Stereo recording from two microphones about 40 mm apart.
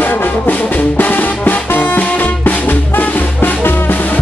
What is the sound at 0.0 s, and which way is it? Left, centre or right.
Music, left.